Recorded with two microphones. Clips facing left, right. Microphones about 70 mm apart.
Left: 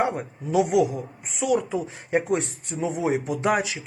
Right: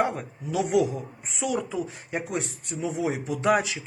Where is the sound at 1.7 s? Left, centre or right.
Left.